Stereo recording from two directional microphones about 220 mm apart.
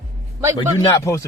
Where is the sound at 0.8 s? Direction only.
15° left (ahead or behind).